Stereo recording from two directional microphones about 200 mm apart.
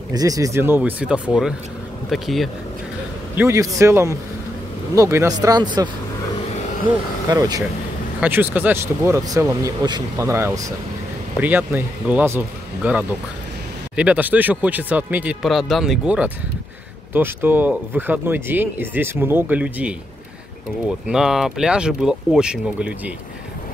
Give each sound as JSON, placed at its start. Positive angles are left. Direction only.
{"t": 0.1, "sound": "speech", "side_deg": -20}
{"t": 3.3, "sound": "speech", "side_deg": -15}
{"t": 7.2, "sound": "speech", "side_deg": -20}
{"t": 8.2, "sound": "speech", "side_deg": -10}
{"t": 21.1, "sound": "speech", "side_deg": 0}